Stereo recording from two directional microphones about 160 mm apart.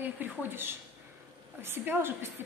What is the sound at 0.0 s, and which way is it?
A woman's voice, 10° right (ahead or behind).